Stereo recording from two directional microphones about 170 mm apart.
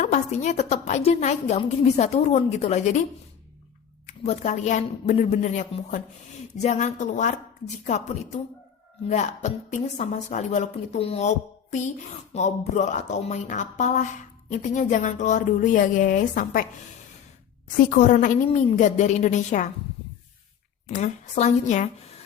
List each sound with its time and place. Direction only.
0.0 s a woman's voice: 45° left (ahead or behind)
4.0 s speech: 45° left (ahead or behind)
17.9 s speech: 45° left (ahead or behind)
20.9 s speech: 45° left (ahead or behind)